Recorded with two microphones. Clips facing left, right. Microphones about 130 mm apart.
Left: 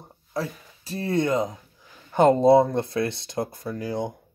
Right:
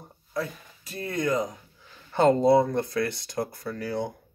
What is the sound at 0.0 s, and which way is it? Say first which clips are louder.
Speech: left 1 dB; 30° left (ahead or behind).